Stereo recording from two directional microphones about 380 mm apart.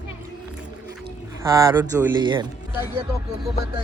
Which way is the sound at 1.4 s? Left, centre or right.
Centre.